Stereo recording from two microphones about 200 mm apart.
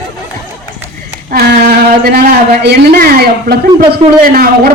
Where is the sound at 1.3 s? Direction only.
55° right (ahead or behind).